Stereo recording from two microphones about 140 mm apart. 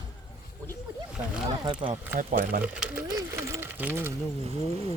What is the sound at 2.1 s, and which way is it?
Speech, 75° right (ahead or behind).